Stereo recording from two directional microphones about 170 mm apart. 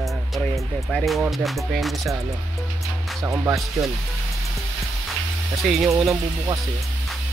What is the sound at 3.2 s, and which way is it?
Speech, 20° right (ahead or behind).